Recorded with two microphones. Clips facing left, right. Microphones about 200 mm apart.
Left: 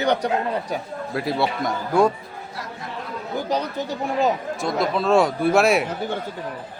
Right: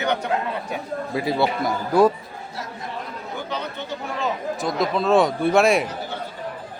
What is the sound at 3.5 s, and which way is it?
Speech, 40° left (ahead or behind).